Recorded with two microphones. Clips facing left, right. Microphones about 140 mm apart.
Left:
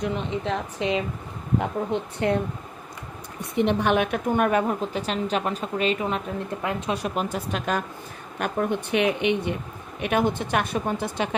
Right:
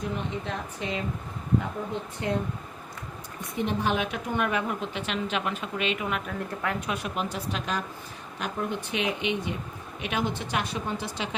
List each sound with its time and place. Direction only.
0.0 s a woman's voice: 85° left
1.9 s speech: 70° left (ahead or behind)
3.6 s a woman's voice: 70° left (ahead or behind); by 6.9 s 20° left (ahead or behind)
6.9 s speech: 40° left (ahead or behind)